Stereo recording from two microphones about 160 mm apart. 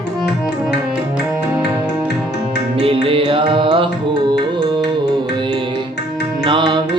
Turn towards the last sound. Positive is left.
turn(degrees=-30)  # may be behind; listen again after turning